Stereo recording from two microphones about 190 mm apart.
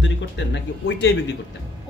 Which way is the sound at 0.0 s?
70° left (ahead or behind).